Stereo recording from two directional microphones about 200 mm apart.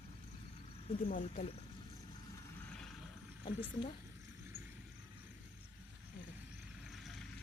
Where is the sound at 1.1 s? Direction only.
40° left (ahead or behind).